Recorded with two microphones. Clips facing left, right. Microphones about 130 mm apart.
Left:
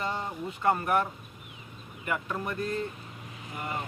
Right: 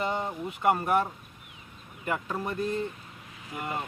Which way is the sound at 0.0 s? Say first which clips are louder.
Right 3 dB; 20° right (ahead or behind).